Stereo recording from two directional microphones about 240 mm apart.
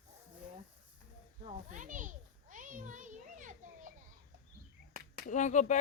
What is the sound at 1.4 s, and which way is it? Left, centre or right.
Children playing, right.